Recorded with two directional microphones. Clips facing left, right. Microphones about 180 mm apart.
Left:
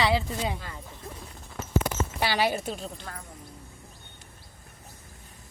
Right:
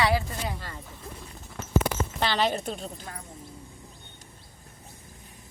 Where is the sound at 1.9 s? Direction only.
80° right.